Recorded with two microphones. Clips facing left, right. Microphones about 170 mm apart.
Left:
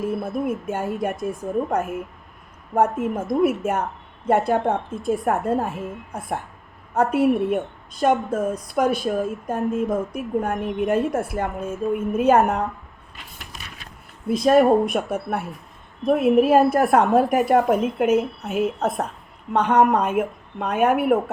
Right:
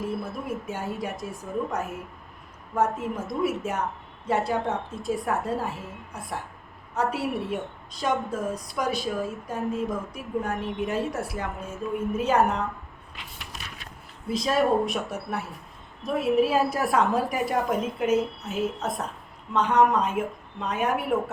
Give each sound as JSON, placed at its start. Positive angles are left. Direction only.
{"t": 0.2, "sound": "a woman's voice", "side_deg": 55}
{"t": 14.3, "sound": "a woman's voice", "side_deg": 55}